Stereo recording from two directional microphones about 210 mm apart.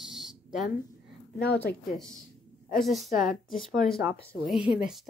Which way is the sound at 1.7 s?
45° left (ahead or behind).